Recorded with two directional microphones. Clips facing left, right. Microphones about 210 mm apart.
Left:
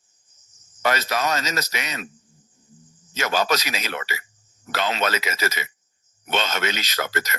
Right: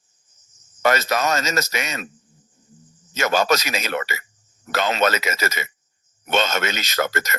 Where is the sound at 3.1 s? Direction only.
50° right (ahead or behind).